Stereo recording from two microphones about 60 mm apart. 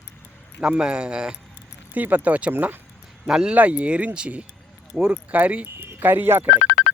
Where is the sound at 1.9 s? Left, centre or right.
Right.